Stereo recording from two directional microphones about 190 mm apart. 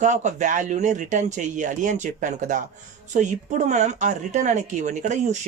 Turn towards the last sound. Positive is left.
turn(degrees=-40)  # may be behind; listen again after turning